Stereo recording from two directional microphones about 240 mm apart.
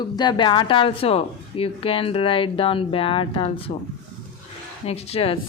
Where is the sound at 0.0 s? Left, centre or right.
Centre.